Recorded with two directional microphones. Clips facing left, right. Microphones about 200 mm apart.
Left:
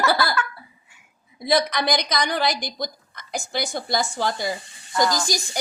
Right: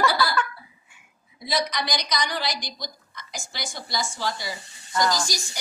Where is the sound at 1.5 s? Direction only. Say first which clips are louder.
Left 6 dB; 55° left (ahead or behind).